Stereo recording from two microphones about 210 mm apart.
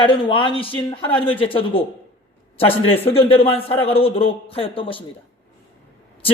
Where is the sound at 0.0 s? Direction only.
20° left (ahead or behind).